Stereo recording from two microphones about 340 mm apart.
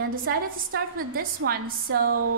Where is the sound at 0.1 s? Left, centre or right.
Right.